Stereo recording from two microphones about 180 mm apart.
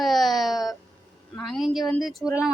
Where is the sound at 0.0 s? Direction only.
Centre (ahead or behind).